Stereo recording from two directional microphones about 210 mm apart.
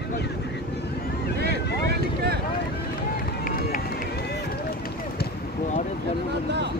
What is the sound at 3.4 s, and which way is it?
Run, 45° left (ahead or behind).